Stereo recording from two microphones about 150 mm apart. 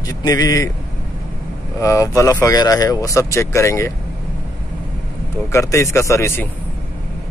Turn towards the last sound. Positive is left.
turn(degrees=20)  # may be behind; listen again after turning